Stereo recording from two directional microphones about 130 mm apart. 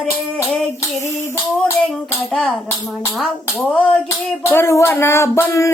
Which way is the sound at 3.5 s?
10° left (ahead or behind).